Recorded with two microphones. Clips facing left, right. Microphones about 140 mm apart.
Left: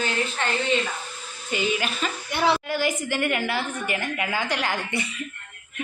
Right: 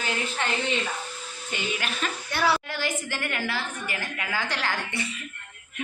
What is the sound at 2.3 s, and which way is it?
A woman's voice, 20° left (ahead or behind).